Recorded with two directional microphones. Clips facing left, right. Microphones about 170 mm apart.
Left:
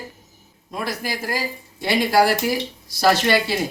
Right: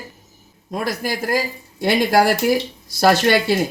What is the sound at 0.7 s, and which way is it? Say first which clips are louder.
Speech: right 4 dB; 45° right (ahead or behind).